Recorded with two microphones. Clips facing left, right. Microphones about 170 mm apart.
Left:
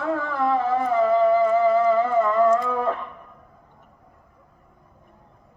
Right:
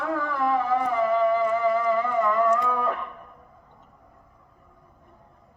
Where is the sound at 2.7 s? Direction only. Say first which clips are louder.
Left 2 dB; 30° left (ahead or behind).